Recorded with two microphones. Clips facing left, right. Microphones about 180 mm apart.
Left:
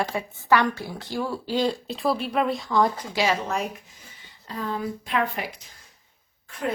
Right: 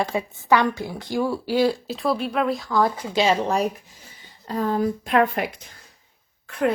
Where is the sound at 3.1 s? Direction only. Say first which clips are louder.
Right 4 dB; 25° right (ahead or behind); by 5.5 s 50° right (ahead or behind).